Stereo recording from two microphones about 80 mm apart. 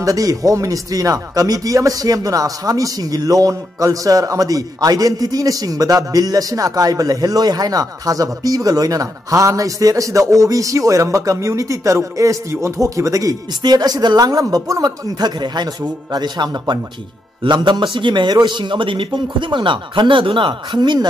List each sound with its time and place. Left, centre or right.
0.0 s speech: right
17.4 s a man's voice: right